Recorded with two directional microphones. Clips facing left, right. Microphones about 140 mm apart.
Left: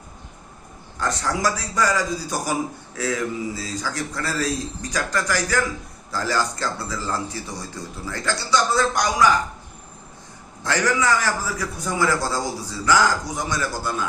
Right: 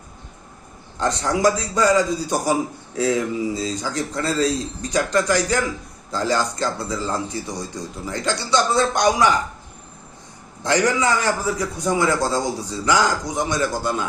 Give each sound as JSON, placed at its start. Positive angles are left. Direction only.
{"t": 0.9, "sound": "a man's voice", "side_deg": -20}
{"t": 10.6, "sound": "a man's voice", "side_deg": -20}